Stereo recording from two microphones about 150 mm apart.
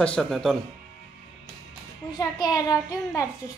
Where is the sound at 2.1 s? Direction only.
25° left (ahead or behind).